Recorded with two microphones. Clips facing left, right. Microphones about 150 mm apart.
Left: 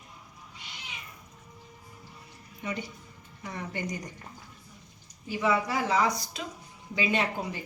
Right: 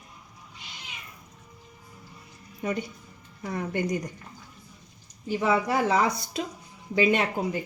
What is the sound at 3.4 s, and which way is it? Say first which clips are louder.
Speech: right 7 dB; 45° right (ahead or behind).